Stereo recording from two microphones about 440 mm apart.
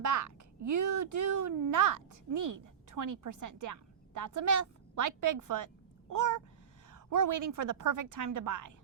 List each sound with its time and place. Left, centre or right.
0.0 s a child's voice: right